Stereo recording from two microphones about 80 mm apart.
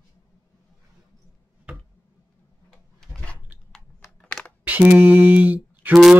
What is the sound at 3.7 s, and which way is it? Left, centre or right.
Computer keyboard, centre.